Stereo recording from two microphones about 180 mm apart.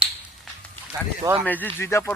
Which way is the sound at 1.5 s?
10° left (ahead or behind).